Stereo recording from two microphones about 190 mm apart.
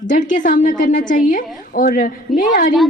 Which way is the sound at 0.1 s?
45° left (ahead or behind).